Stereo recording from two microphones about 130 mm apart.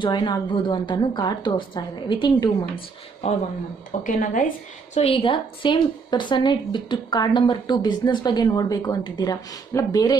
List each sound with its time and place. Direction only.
0.0 s a woman's voice: 35° left (ahead or behind)
2.7 s speech: 55° left (ahead or behind)
4.0 s speech: 80° left
4.9 s a woman's voice: 45° left (ahead or behind); by 10.1 s 30° left (ahead or behind)